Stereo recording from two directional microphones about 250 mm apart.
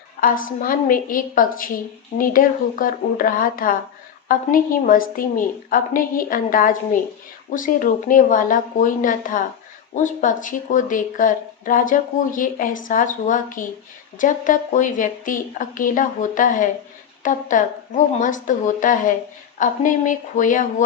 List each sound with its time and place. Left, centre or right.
0.2 s a woman's voice: left